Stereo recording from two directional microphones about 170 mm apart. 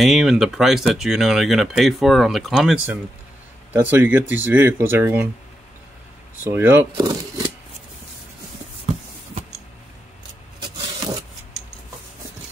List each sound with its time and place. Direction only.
0.0 s speech: centre (ahead or behind)
6.4 s speech: 10° right (ahead or behind)
7.0 s speech: 25° right (ahead or behind)
8.9 s a sound: 40° right (ahead or behind)